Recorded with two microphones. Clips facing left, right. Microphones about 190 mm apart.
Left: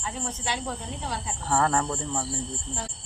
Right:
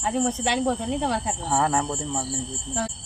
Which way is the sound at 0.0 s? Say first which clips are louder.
Right 10 dB; 65° right (ahead or behind).